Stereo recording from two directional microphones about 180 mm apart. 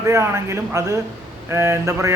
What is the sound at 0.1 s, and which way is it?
A man's voice, 15° right (ahead or behind).